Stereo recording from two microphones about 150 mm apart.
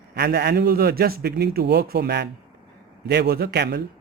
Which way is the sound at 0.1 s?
90° right.